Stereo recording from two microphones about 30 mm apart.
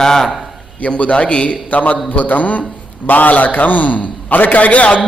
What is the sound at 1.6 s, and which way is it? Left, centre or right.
A man's voice, left.